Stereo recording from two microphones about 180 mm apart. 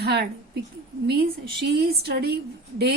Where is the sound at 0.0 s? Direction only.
65° right (ahead or behind).